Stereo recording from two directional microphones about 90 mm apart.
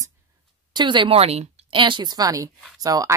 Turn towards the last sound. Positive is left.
turn(degrees=-40)  # may be behind; listen again after turning